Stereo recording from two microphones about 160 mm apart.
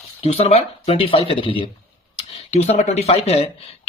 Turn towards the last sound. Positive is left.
turn(degrees=40)  # may be behind; listen again after turning